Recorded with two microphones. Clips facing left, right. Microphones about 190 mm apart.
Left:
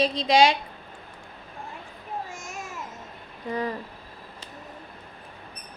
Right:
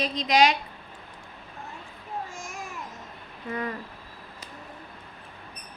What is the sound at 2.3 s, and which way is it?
Babbling, 20° left (ahead or behind).